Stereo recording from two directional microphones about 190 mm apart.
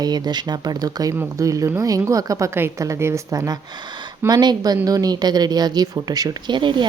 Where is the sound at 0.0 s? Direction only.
20° right (ahead or behind).